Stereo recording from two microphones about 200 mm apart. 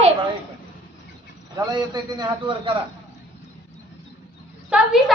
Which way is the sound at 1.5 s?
20° right (ahead or behind).